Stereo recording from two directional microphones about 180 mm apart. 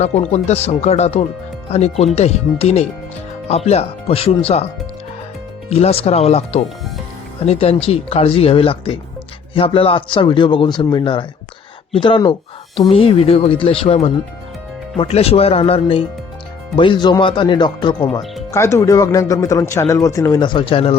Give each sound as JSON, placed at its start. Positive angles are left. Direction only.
{"t": 0.0, "sound": "speech", "side_deg": 40}
{"t": 5.7, "sound": "a man's voice", "side_deg": 35}